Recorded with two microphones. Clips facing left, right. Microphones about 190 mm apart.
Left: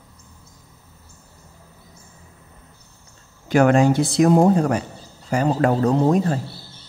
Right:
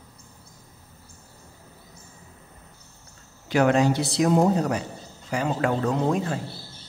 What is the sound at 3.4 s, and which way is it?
Speech, 50° left (ahead or behind).